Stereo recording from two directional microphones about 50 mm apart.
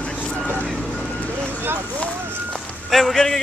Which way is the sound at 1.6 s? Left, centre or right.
Right.